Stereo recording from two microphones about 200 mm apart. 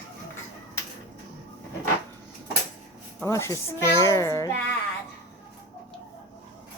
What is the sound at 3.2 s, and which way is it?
A child's voice, 15° left (ahead or behind).